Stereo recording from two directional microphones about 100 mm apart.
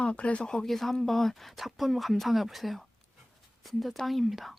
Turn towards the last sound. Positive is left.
turn(degrees=0)  # may be behind; listen again after turning